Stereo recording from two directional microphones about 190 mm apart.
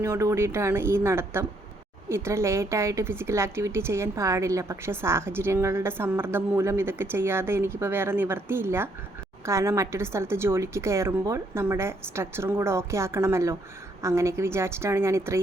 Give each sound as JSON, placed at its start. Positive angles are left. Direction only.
{"t": 0.0, "sound": "a woman's voice", "side_deg": -15}